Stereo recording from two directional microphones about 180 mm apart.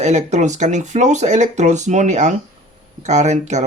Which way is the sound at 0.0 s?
40° right (ahead or behind).